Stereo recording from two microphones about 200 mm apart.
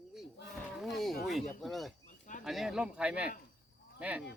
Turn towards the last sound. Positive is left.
turn(degrees=-5)  # may be behind; listen again after turning